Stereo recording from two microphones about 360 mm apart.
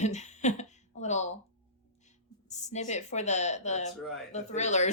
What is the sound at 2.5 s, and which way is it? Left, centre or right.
Speech, centre.